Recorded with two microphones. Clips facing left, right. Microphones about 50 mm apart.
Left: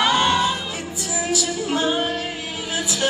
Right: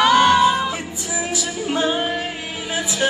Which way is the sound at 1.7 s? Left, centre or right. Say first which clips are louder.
Right 1 dB; right.